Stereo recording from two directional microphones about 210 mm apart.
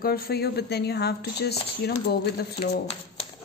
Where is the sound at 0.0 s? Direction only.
50° left (ahead or behind).